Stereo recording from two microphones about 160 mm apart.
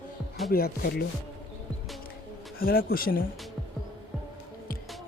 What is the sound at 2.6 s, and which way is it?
Speech, 65° left (ahead or behind).